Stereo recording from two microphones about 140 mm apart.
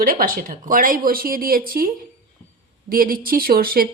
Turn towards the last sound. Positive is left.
turn(degrees=-90)